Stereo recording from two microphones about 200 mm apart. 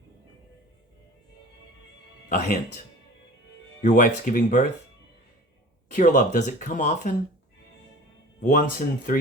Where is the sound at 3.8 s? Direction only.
40° left (ahead or behind).